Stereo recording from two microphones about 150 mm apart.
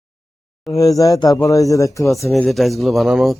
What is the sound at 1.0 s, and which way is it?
Speech, 25° left (ahead or behind).